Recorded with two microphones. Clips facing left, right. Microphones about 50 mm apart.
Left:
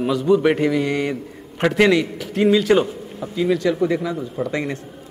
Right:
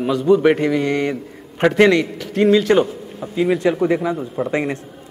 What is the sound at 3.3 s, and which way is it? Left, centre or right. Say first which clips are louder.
Speech: right 2 dB; right.